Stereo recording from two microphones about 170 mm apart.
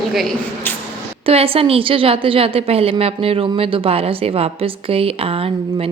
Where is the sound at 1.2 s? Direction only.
35° right (ahead or behind).